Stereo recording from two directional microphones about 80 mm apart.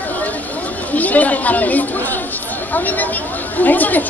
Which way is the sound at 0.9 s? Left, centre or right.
Centre.